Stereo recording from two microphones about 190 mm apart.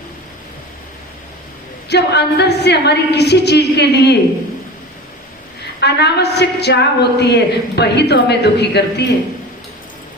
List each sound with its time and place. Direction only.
1.9 s a woman's voice: 60° left (ahead or behind)
5.8 s a woman's voice: 60° left (ahead or behind)